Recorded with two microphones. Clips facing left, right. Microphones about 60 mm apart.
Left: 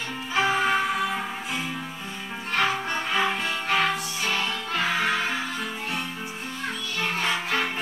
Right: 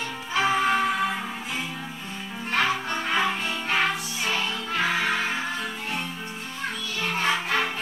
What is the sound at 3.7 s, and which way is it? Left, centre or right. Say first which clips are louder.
Music: left 1 dB; centre.